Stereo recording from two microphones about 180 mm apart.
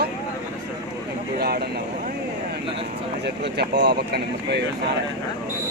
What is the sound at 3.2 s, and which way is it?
Speech, 70° right (ahead or behind).